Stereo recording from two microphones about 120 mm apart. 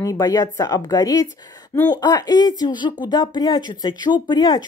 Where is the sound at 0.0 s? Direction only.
30° left (ahead or behind).